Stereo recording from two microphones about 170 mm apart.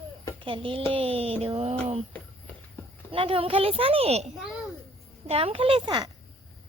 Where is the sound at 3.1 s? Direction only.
35° right (ahead or behind).